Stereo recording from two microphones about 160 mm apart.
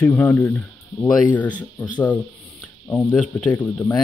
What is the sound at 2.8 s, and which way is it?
Speech, 10° left (ahead or behind).